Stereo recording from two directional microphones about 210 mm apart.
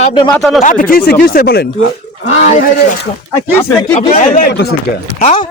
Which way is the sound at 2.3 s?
35° left (ahead or behind).